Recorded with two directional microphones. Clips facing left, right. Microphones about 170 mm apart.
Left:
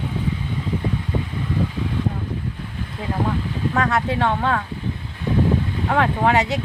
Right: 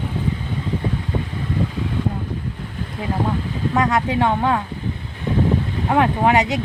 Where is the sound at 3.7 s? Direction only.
15° right (ahead or behind).